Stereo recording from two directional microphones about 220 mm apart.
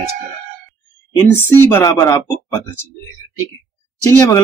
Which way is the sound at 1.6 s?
10° left (ahead or behind).